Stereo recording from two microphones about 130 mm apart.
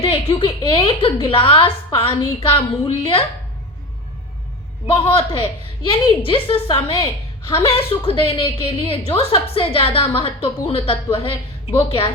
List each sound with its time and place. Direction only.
0.0 s a woman's voice: 45° left (ahead or behind)
4.9 s a woman's voice: 45° left (ahead or behind)
7.0 s a woman's voice: 20° left (ahead or behind)
7.6 s a woman's voice: 45° left (ahead or behind)